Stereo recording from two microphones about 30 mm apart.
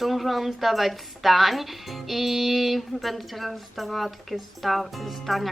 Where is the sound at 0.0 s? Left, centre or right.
Centre.